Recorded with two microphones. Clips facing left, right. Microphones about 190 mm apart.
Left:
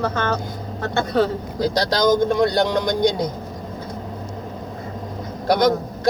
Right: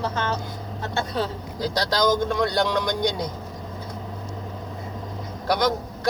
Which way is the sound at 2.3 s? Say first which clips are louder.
Left 4 dB; 40° left (ahead or behind).